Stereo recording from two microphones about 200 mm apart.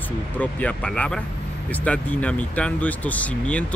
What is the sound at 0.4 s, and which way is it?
Speech, 5° left (ahead or behind).